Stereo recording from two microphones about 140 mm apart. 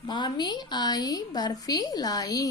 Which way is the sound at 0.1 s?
30° left (ahead or behind).